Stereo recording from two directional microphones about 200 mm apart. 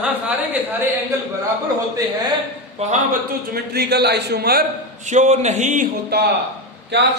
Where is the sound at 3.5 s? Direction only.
55° right (ahead or behind).